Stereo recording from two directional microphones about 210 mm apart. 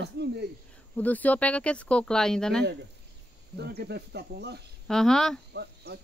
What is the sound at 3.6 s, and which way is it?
Speech, 50° right (ahead or behind).